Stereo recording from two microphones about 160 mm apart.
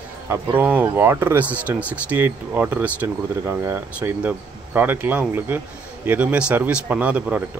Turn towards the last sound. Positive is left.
turn(degrees=-10)  # may be behind; listen again after turning